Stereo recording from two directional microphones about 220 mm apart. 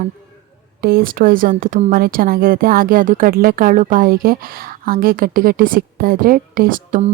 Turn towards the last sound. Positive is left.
turn(degrees=-35)  # may be behind; listen again after turning